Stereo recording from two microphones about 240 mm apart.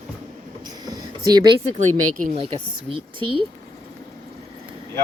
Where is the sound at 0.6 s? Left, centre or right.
Centre.